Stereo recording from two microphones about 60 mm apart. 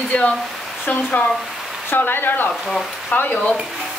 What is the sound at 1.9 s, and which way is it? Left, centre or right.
Speech, left.